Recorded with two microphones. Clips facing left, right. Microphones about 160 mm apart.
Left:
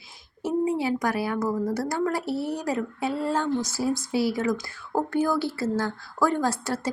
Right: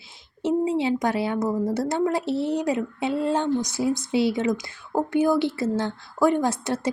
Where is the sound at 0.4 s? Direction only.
20° right (ahead or behind).